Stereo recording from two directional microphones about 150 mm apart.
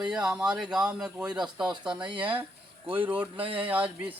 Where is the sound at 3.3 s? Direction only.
35° right (ahead or behind).